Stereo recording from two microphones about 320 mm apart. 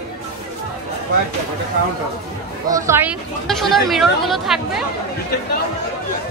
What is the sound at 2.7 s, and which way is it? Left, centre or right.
Speech, centre.